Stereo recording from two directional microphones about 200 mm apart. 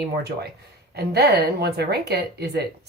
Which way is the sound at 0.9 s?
55° right (ahead or behind).